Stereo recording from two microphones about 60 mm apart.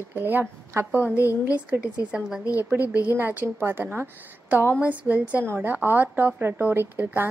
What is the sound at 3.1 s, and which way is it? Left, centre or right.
A woman's voice, right.